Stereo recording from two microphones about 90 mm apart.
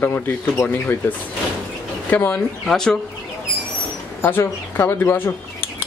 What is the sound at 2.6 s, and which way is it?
Speech, 5° left (ahead or behind).